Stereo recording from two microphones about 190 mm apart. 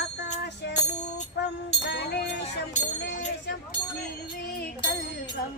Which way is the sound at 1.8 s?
60° left (ahead or behind).